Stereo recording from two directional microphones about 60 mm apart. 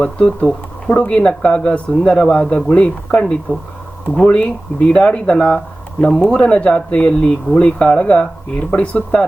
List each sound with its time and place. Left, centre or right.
0.0 s speech: left